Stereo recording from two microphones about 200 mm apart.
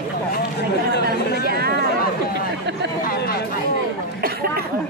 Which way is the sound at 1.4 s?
50° right (ahead or behind).